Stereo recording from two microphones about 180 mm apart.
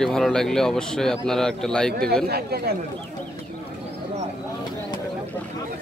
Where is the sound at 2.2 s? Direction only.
60° right (ahead or behind).